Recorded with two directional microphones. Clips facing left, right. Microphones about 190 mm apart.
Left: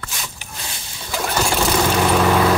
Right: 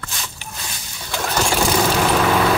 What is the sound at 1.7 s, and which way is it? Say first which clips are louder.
Vehicle: left 2 dB; centre (ahead or behind).